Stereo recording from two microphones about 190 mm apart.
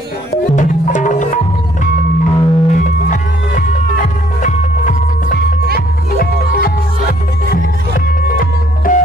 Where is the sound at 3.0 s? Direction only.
45° left (ahead or behind).